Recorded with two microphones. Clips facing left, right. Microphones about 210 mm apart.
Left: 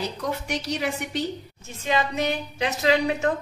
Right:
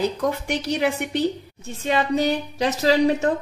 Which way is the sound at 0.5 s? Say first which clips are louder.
Right 5 dB; 60° right (ahead or behind).